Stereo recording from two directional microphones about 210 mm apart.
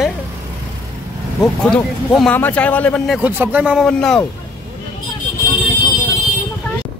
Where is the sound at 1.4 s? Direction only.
5° left (ahead or behind).